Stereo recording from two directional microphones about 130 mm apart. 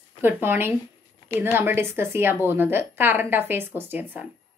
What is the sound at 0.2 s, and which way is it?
A woman's voice, 15° right (ahead or behind).